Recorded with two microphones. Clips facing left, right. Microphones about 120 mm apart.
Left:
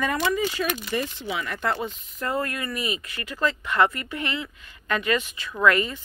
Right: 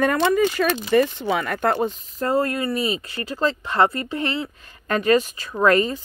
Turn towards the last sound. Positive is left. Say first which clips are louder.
# right 3 dB
turn(degrees=-35)  # may be behind; listen again after turning